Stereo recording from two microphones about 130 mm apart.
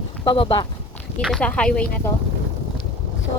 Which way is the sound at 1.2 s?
5° left (ahead or behind).